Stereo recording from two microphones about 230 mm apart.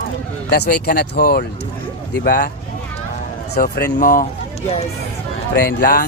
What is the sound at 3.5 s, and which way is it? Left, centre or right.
Speech, left.